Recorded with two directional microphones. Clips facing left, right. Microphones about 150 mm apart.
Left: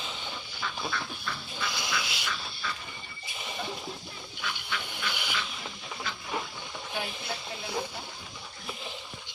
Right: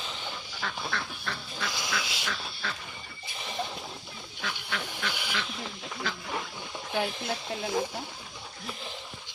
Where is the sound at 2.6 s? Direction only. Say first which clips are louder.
Even; 65° right (ahead or behind).